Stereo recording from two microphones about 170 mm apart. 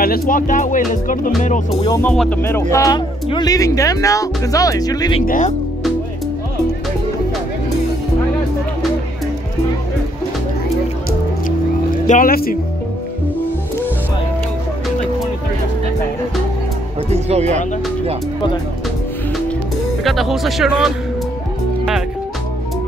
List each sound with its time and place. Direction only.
0.0 s speech: 55° left (ahead or behind)
2.0 s speech: 10° left (ahead or behind); by 5.2 s 25° left (ahead or behind)
5.2 s speech: 50° left (ahead or behind)
12.1 s speech: 55° left (ahead or behind)
17.1 s music: 40° right (ahead or behind)
20.0 s speech: centre (ahead or behind)